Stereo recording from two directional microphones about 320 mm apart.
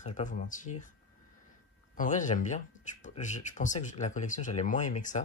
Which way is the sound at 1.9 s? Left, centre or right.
Left.